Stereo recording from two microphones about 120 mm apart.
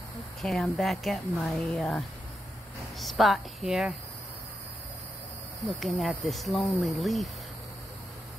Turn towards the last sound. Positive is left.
turn(degrees=0)  # may be behind; listen again after turning